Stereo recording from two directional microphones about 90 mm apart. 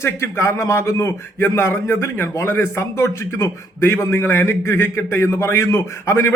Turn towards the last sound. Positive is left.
turn(degrees=30)  # may be behind; listen again after turning